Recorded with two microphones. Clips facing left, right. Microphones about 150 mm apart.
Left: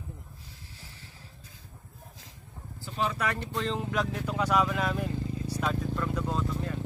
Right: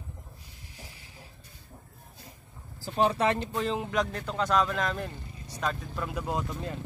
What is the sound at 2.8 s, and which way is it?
Speech, 40° right (ahead or behind).